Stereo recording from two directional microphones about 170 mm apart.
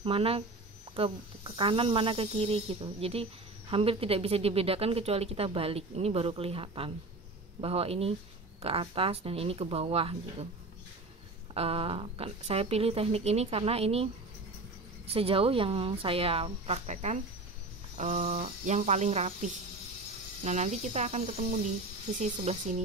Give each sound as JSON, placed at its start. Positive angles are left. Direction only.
{"t": 0.0, "sound": "a woman's voice", "side_deg": -35}
{"t": 11.5, "sound": "a woman's voice", "side_deg": -35}
{"t": 15.0, "sound": "a woman's voice", "side_deg": -35}